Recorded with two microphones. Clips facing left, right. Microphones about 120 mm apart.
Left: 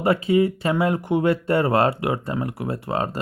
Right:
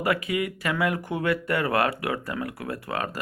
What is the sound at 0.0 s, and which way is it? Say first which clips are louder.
Speech: left 7 dB; 30° left (ahead or behind).